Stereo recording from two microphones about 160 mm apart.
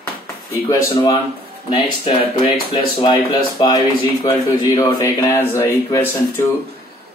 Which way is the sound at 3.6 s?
30° left (ahead or behind).